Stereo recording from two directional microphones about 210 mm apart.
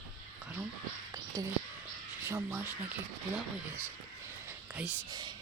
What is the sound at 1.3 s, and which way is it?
Speech, 15° right (ahead or behind).